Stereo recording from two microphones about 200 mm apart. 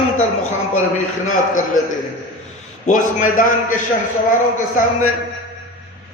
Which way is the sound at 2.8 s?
40° left (ahead or behind).